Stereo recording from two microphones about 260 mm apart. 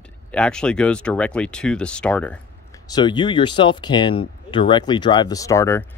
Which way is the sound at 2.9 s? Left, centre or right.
Centre.